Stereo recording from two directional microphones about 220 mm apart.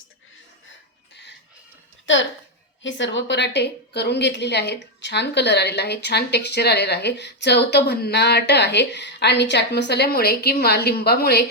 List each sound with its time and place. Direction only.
1.1 s music: 50° left (ahead or behind)
2.8 s a woman's voice: 55° left (ahead or behind)